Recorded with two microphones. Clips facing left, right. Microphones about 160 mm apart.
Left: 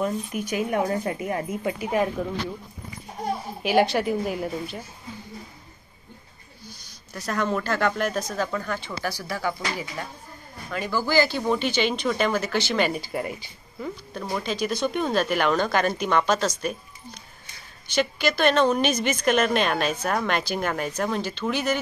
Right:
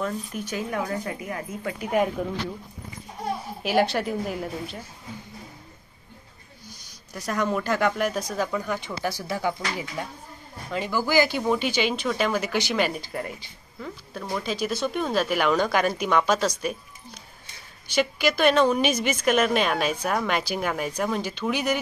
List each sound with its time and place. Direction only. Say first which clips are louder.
0.0 s speech: left 3 dB; 15° left (ahead or behind)
0.7 s a woman's voice: left 5 dB; 30° left (ahead or behind)
1.8 s speech: right 2 dB; centre (ahead or behind)
3.6 s speech: left 2 dB; centre (ahead or behind)
6.7 s a woman's voice: even; 10° right (ahead or behind)
12.7 s a woman's voice: left 1 dB; centre (ahead or behind)